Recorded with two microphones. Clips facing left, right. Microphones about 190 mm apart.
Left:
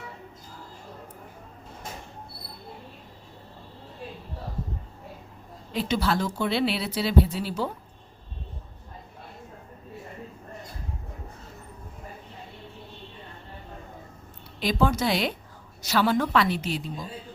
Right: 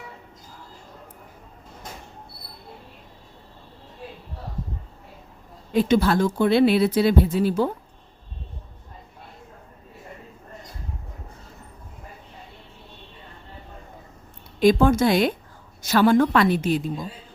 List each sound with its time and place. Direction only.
5.7 s speech: 50° right (ahead or behind)
14.6 s speech: 50° right (ahead or behind)